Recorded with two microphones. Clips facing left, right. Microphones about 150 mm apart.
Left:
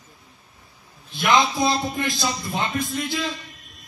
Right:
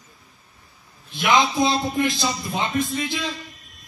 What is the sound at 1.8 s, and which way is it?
Speech, 20° right (ahead or behind).